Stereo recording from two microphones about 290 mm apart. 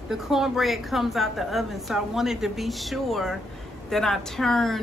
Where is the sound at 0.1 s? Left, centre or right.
Centre.